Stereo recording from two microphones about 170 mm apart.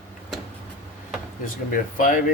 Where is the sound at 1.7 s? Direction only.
50° left (ahead or behind).